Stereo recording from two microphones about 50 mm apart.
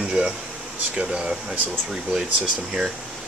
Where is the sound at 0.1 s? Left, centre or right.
Centre.